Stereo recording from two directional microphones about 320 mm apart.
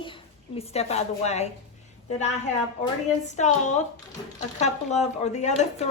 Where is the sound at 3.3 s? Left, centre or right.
Left.